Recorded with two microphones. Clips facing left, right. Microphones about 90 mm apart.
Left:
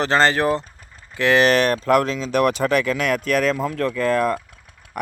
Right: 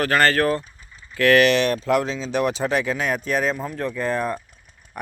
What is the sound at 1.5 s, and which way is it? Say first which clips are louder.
Speech: left 2 dB; 45° left (ahead or behind).